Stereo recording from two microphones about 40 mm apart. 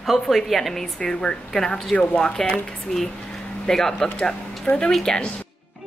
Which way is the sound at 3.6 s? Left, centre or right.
Centre.